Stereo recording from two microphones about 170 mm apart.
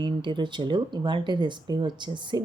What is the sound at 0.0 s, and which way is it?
Speech, 30° right (ahead or behind).